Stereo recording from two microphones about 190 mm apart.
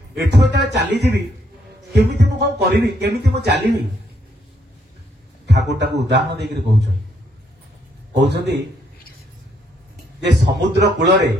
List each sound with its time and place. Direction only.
0.3 s a man's voice: 65° right (ahead or behind)
5.7 s a man's voice: 65° right (ahead or behind)
8.1 s a man's voice: 65° right (ahead or behind)
10.2 s a man's voice: 60° right (ahead or behind)